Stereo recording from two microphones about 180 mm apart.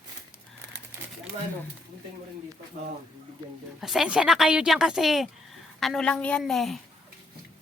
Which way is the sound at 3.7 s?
Centre (ahead or behind).